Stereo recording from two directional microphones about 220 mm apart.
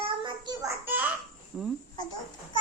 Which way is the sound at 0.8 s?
10° right (ahead or behind).